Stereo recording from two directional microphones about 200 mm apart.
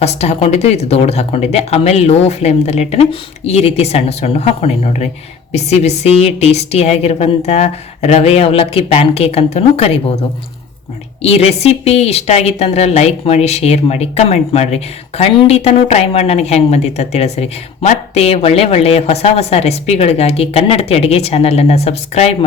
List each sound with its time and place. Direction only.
0.0 s a woman's voice: 30° left (ahead or behind)
11.2 s a woman's voice: 30° left (ahead or behind)